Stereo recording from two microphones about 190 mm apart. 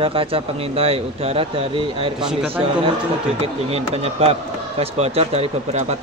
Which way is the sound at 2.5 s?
30° right (ahead or behind).